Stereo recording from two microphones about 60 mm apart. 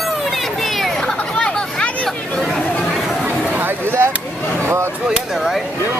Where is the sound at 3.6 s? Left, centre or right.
Right.